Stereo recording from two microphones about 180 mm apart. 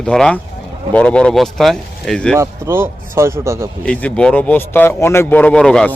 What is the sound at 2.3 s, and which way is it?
A man's voice, 15° right (ahead or behind).